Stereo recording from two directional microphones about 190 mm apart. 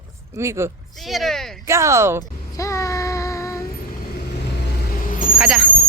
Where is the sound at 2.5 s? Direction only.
15° left (ahead or behind).